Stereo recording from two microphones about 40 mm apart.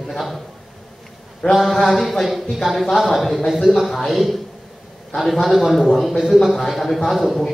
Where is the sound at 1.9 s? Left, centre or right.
Centre.